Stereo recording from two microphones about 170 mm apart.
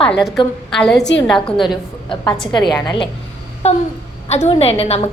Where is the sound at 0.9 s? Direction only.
90° left.